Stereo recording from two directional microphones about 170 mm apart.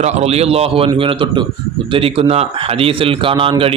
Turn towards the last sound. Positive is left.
turn(degrees=-30)  # may be behind; listen again after turning